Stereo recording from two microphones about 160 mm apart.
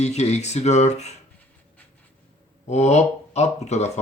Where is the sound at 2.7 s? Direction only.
45° left (ahead or behind).